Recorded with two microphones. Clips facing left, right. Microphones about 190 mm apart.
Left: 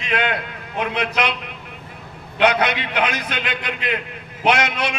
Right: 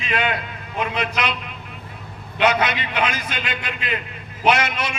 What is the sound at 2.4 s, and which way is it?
A man's voice, 60° left (ahead or behind).